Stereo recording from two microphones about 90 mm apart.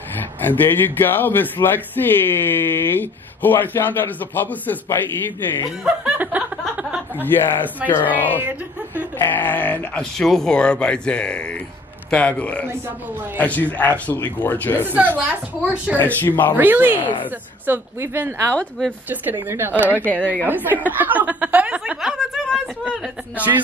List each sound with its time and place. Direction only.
0.4 s speech: 20° left (ahead or behind)
5.9 s chuckle: 10° right (ahead or behind)
7.2 s speech: 20° left (ahead or behind)
8.4 s speech: 20° right (ahead or behind)
9.2 s speech: 20° left (ahead or behind)
10.1 s speech: 5° left (ahead or behind); by 15.0 s 20° left (ahead or behind)
15.1 s a woman's voice: 10° right (ahead or behind)
16.0 s speech: 20° left (ahead or behind)
16.5 s speech: 20° right (ahead or behind)
19.7 s speech: 20° left (ahead or behind)
20.4 s speech: 20° right (ahead or behind); by 22.6 s 5° right (ahead or behind)
23.3 s speech: 20° right (ahead or behind)